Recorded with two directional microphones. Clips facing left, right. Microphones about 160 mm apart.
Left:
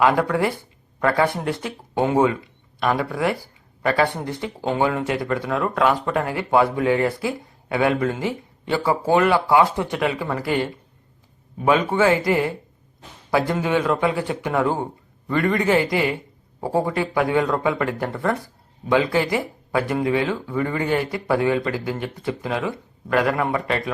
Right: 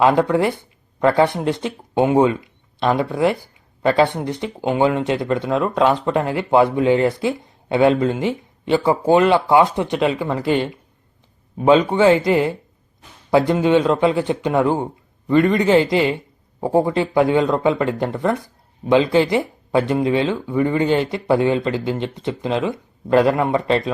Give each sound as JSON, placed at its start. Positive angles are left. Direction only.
{"t": 0.0, "sound": "speech", "side_deg": -20}